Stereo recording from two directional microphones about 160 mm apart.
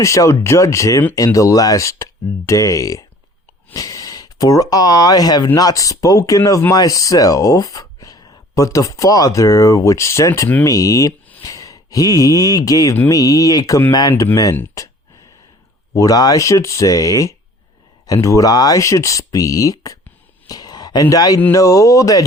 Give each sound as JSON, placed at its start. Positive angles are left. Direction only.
{"t": 0.0, "sound": "speech", "side_deg": 20}
{"t": 16.0, "sound": "speech", "side_deg": 20}
{"t": 20.5, "sound": "a sound", "side_deg": 25}
{"t": 21.4, "sound": "speech", "side_deg": 20}